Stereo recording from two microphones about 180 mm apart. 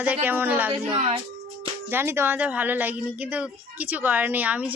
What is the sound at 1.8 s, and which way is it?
A woman's voice, 15° right (ahead or behind).